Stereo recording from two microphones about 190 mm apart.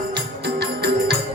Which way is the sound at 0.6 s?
60° right (ahead or behind).